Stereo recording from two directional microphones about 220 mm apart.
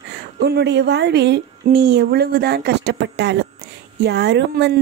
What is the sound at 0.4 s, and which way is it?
Speech, 50° right (ahead or behind).